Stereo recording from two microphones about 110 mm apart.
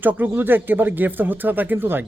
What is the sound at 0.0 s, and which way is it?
Speech, 15° right (ahead or behind).